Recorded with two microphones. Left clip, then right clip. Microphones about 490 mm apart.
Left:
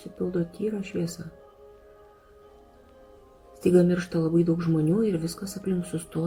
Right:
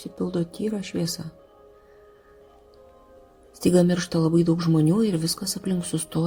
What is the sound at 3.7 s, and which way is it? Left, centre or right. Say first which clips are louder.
Speech: right 1 dB; centre.